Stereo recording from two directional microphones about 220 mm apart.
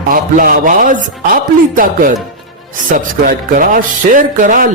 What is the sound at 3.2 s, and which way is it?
Speech, 40° right (ahead or behind).